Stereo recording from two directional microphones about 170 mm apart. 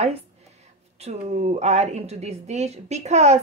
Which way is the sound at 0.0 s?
40° right (ahead or behind).